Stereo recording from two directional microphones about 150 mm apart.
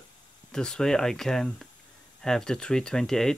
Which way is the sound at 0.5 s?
5° left (ahead or behind).